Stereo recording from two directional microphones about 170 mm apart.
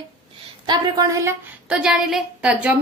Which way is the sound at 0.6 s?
25° right (ahead or behind).